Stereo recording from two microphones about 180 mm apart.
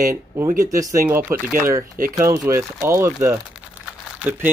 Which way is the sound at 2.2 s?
15° right (ahead or behind).